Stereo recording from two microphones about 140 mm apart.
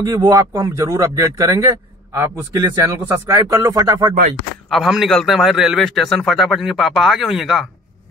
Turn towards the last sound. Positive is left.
turn(degrees=0)  # may be behind; listen again after turning